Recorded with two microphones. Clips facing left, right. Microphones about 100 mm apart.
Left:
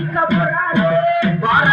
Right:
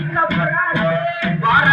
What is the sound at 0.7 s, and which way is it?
Music, 15° left (ahead or behind).